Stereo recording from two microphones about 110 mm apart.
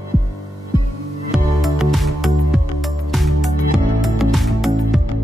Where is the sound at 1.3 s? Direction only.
Centre (ahead or behind).